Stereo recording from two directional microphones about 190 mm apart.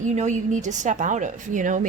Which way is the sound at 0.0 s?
40° right (ahead or behind).